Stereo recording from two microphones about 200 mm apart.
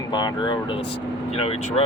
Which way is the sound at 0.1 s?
20° left (ahead or behind).